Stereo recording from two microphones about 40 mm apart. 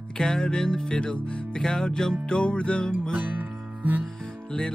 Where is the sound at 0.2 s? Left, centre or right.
Centre.